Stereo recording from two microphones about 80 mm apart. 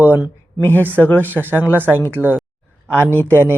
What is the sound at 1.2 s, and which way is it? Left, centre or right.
Speech, right.